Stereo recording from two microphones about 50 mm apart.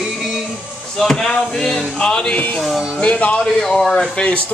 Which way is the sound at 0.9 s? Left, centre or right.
Centre.